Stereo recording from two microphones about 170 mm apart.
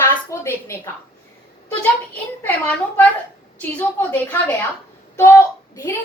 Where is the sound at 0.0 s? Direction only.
15° left (ahead or behind).